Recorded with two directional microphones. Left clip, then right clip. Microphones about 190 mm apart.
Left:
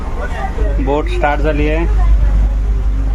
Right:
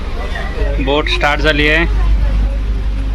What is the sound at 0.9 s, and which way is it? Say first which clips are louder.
A man's voice: right 2 dB; 10° left (ahead or behind).